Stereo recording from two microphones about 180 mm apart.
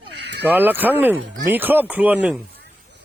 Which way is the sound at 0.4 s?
10° right (ahead or behind).